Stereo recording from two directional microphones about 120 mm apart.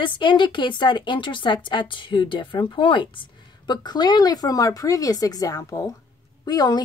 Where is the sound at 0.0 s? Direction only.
40° left (ahead or behind).